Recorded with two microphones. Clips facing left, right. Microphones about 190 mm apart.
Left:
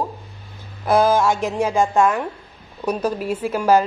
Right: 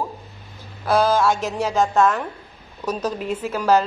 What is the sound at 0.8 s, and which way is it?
A woman's voice, 15° left (ahead or behind).